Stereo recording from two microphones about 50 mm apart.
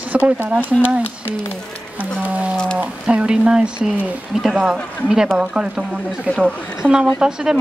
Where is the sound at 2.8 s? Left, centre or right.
Right.